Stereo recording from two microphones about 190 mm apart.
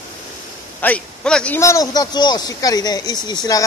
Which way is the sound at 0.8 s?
5° left (ahead or behind).